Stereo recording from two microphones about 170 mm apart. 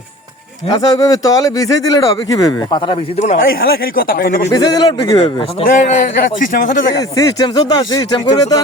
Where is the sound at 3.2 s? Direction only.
50° left (ahead or behind).